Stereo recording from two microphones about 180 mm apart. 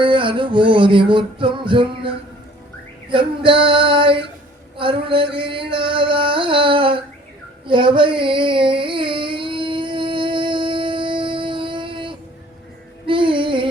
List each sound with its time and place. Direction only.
0.0 s music: 30° right (ahead or behind)
7.7 s a sound: 25° right (ahead or behind)
13.1 s music: 30° right (ahead or behind)